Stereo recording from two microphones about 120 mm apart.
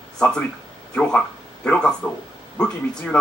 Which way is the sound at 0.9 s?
5° left (ahead or behind).